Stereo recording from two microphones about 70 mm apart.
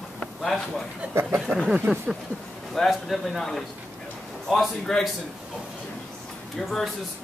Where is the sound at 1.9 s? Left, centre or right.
Right.